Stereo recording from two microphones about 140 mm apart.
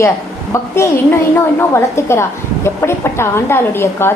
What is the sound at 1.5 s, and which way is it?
A woman's voice, 20° left (ahead or behind).